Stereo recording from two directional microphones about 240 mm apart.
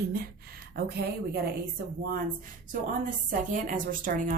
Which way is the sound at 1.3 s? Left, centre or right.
Right.